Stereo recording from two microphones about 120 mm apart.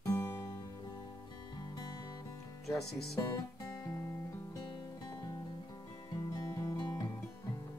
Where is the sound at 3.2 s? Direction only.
30° left (ahead or behind).